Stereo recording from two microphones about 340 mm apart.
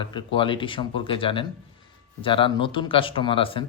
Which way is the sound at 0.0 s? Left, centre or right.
Centre.